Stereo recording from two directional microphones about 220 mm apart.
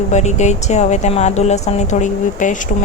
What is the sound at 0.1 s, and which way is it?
Speech, 30° left (ahead or behind).